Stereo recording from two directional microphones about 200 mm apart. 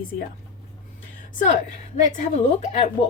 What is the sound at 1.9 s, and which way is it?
A woman's voice, 35° left (ahead or behind).